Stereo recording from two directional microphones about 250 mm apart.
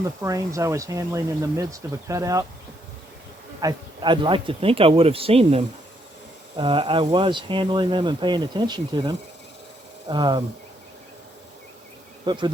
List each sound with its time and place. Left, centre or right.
0.2 s speech: centre
3.6 s speech: centre
12.2 s insect: centre